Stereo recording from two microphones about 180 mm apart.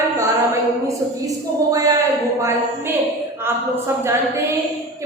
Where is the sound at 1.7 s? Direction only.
20° right (ahead or behind).